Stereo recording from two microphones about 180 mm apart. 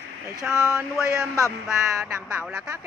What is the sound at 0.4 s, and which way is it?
Speech, centre (ahead or behind).